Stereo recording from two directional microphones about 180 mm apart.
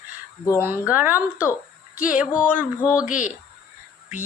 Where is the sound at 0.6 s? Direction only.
10° right (ahead or behind).